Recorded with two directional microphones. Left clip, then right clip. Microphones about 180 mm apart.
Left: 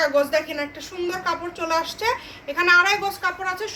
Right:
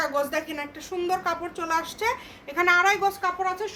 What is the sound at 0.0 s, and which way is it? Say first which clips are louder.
A woman's voice: left 6 dB; 50° right (ahead or behind).